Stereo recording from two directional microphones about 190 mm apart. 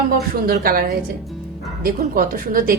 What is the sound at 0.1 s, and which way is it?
A woman's voice, 50° right (ahead or behind).